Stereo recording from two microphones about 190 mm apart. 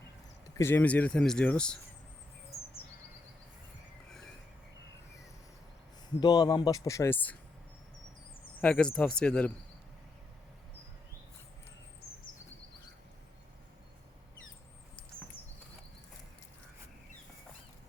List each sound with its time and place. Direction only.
0.5 s speech: 10° left (ahead or behind)
6.1 s speech: 20° left (ahead or behind)
8.6 s speech: 5° left (ahead or behind)